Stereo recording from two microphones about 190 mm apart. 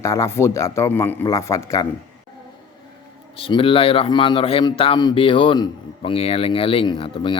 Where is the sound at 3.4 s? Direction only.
30° left (ahead or behind).